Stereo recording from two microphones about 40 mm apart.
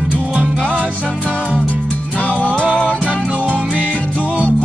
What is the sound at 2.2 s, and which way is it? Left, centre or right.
Music, left.